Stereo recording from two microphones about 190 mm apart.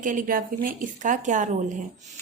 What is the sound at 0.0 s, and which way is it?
Speech, 45° right (ahead or behind).